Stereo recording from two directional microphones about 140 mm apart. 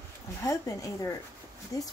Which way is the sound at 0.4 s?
20° left (ahead or behind).